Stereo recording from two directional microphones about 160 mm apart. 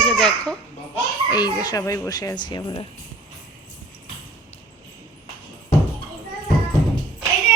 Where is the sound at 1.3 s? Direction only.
25° left (ahead or behind).